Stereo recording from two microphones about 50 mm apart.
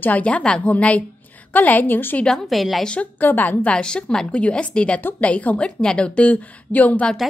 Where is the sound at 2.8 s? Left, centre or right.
Centre.